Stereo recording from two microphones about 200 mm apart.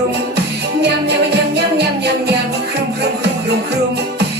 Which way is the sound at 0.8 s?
55° right (ahead or behind).